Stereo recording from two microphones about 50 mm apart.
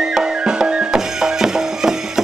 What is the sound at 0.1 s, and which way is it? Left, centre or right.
Music, centre.